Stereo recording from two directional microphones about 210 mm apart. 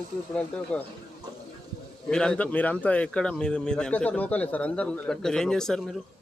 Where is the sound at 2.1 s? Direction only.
5° left (ahead or behind).